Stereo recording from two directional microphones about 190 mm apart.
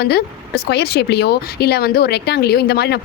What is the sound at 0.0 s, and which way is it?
Speech, 60° left (ahead or behind).